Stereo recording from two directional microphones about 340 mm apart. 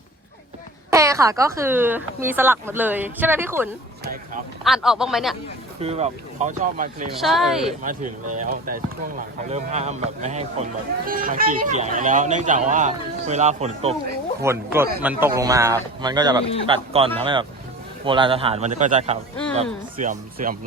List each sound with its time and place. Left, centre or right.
0.9 s speech: centre
5.8 s speech: centre
7.2 s speech: centre
8.3 s speech: right
14.4 s speech: centre; by 20.6 s right